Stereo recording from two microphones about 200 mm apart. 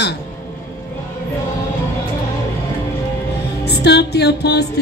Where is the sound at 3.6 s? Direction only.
55° left (ahead or behind).